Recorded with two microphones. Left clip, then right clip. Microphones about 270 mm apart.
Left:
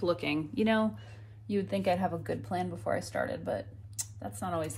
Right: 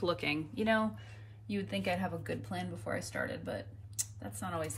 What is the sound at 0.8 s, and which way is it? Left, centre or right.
Speech, centre.